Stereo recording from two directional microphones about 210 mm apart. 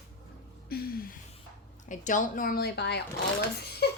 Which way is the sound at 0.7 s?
45° left (ahead or behind).